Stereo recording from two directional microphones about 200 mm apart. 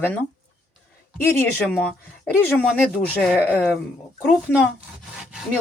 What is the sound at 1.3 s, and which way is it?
Speech, 10° left (ahead or behind).